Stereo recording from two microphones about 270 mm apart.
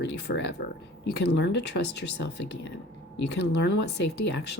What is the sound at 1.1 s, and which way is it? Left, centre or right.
Speech, left.